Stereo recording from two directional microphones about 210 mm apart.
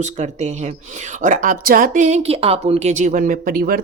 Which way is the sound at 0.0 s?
35° right (ahead or behind).